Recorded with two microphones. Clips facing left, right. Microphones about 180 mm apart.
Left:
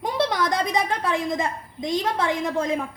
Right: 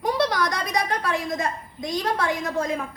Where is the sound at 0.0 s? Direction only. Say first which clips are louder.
Even; 25° left (ahead or behind).